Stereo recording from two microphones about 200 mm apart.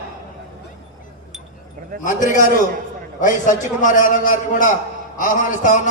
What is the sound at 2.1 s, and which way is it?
A man's voice, 40° left (ahead or behind).